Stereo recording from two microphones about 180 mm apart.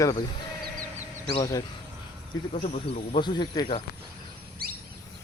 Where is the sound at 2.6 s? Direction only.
35° left (ahead or behind).